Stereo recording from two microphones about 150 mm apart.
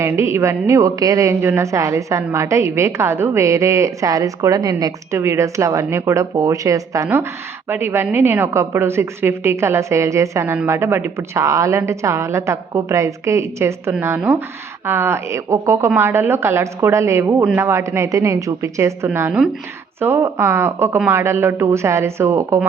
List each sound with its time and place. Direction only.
0.0 s a woman's voice: 20° right (ahead or behind)